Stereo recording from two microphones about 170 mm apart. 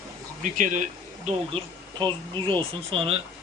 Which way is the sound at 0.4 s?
50° right (ahead or behind).